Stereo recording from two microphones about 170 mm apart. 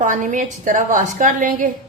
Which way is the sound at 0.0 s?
50° right (ahead or behind).